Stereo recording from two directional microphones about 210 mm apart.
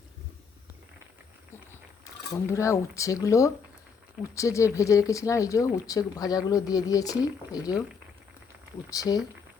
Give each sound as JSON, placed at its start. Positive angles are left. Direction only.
{"t": 2.5, "sound": "speech", "side_deg": 15}
{"t": 8.9, "sound": "speech", "side_deg": 15}